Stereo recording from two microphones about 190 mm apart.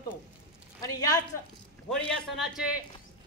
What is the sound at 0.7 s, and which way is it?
Speech, 20° left (ahead or behind).